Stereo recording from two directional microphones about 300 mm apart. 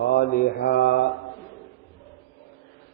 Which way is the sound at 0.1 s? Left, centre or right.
Left.